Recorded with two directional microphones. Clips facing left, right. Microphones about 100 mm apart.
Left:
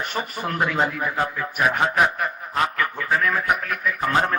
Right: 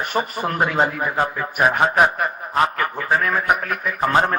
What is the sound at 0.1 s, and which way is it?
A man's voice, 35° right (ahead or behind).